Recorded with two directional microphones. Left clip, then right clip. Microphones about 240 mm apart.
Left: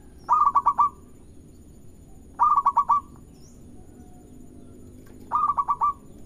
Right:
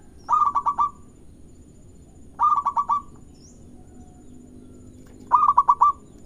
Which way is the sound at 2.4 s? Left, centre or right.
Centre.